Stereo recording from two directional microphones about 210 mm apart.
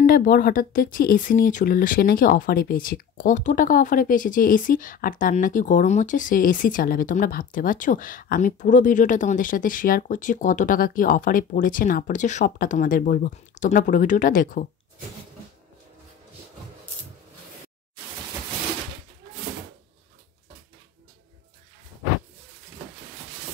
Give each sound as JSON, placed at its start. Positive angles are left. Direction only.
{"t": 0.0, "sound": "speech", "side_deg": 45}